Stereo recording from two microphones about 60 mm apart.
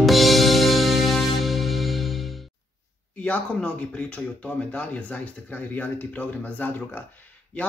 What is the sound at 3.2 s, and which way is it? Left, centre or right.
Speech, left.